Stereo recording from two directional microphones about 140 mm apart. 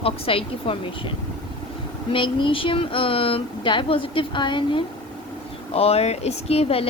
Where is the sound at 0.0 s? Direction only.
40° left (ahead or behind).